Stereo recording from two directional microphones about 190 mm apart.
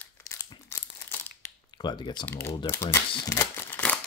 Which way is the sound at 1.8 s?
25° left (ahead or behind).